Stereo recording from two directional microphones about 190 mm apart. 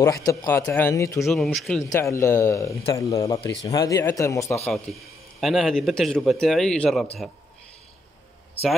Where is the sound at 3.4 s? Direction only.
65° left (ahead or behind).